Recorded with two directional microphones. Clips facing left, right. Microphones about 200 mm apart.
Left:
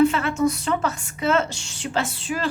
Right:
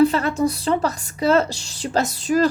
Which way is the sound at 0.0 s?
35° right (ahead or behind).